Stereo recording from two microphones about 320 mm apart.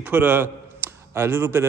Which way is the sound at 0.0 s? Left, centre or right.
Centre.